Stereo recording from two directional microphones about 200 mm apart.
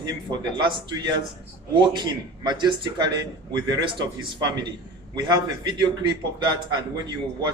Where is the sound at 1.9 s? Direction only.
20° right (ahead or behind).